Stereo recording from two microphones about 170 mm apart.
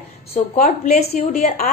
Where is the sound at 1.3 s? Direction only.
60° left (ahead or behind).